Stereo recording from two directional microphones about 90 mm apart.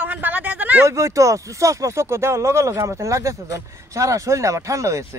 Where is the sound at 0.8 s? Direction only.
35° right (ahead or behind).